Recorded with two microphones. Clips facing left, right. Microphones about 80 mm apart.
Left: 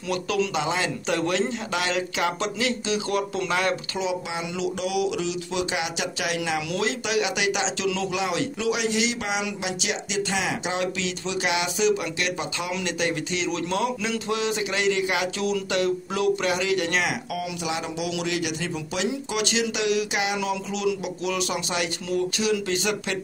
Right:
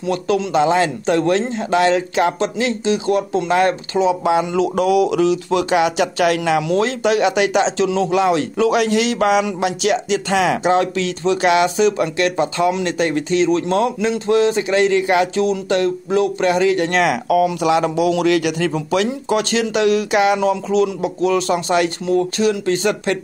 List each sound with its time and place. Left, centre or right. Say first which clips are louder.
0.1 s speech: right 7 dB; right
4.3 s speech: right 12 dB; right
6.7 s speech: right 9 dB; right
10.3 s speech: right 13 dB; right
10.6 s speech: right 10 dB; right
17.0 s a man's voice: right 13 dB; right
17.9 s a man's voice: right 12 dB; right
19.0 s speech: right 7 dB; right